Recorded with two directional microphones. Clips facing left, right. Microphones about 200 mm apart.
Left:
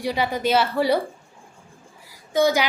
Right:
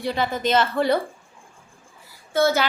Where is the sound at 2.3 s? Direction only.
15° left (ahead or behind).